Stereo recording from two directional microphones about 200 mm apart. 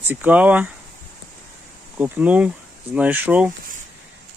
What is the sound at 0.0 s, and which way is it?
Speech, 10° right (ahead or behind).